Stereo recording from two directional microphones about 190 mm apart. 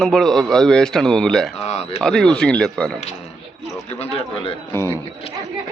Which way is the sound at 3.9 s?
35° left (ahead or behind).